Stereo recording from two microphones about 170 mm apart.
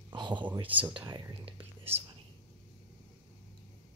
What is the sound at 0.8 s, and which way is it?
Speech, 30° right (ahead or behind).